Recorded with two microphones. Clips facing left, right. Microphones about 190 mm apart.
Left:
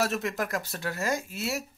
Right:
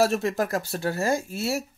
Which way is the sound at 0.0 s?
30° right (ahead or behind).